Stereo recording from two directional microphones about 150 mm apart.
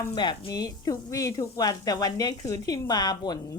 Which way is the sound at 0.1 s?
30° left (ahead or behind).